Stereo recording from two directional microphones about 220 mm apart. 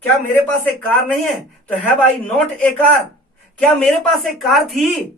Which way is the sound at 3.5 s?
5° left (ahead or behind).